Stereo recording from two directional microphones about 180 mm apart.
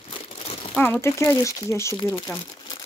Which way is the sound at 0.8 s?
10° left (ahead or behind).